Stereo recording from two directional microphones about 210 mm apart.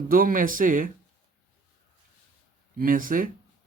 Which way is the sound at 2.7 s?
40° right (ahead or behind).